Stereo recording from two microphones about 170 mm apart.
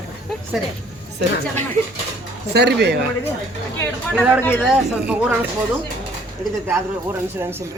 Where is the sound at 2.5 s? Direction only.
80° right.